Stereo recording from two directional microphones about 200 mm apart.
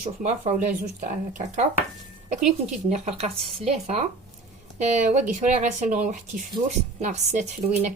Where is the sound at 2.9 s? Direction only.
30° right (ahead or behind).